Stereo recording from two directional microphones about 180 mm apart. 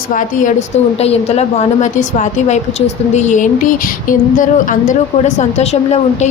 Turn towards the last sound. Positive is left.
turn(degrees=40)  # may be behind; listen again after turning